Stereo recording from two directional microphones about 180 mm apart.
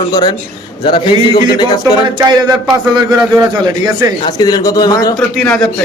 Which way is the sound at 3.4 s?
20° right (ahead or behind).